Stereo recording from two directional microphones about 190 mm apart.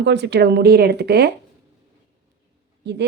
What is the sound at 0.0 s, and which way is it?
A woman's voice, 65° right (ahead or behind).